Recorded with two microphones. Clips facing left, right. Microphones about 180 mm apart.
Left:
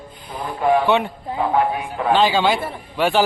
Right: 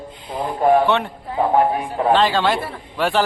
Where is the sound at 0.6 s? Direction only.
45° right (ahead or behind).